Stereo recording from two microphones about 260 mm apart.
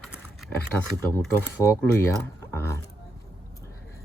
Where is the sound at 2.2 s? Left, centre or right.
Centre.